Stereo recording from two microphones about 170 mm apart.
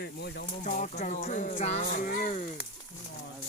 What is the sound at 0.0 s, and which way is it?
Speech, 75° left (ahead or behind).